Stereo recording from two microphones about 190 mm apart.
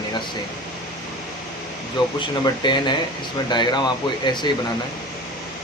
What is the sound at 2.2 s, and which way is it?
Speech, 25° left (ahead or behind).